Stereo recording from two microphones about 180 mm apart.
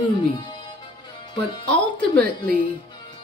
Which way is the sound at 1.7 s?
5° left (ahead or behind).